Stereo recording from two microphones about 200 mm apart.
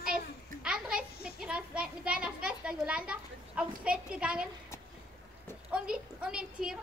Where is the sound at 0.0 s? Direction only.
5° right (ahead or behind).